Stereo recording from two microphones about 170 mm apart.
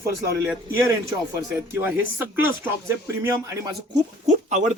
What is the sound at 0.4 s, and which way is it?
Speech, 15° right (ahead or behind).